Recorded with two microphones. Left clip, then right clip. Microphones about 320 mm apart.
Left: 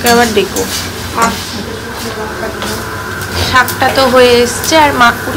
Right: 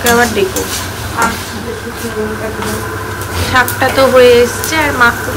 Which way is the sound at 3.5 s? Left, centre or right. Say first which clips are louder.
Left 1 dB; centre.